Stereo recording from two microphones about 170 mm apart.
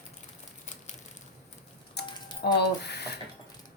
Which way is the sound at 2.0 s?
75° left (ahead or behind).